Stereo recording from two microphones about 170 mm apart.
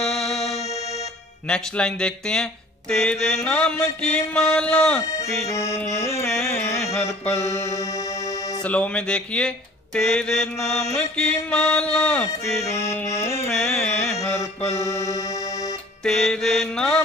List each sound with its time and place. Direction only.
0.1 s music: centre (ahead or behind)
0.4 s music: 40° left (ahead or behind)
1.5 s speech: 5° left (ahead or behind)
5.0 s music: 20° left (ahead or behind)
5.5 s speech: 15° left (ahead or behind)
6.3 s carnatic music: 15° left (ahead or behind)
7.0 s music: 15° left (ahead or behind)
8.6 s speech: 5° left (ahead or behind)
13.5 s speech: 5° left (ahead or behind)
13.8 s music: 15° left (ahead or behind)
16.0 s speech: 5° left (ahead or behind)